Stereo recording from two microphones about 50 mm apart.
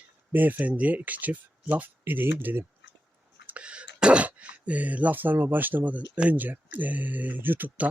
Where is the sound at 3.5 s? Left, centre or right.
Right.